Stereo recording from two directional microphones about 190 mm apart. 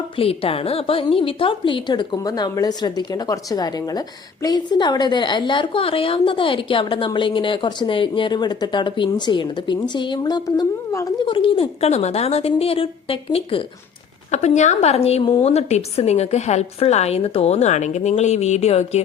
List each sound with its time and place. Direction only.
0.2 s a woman's voice: 30° left (ahead or behind)